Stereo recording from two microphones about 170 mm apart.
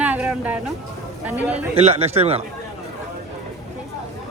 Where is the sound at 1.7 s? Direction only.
40° right (ahead or behind).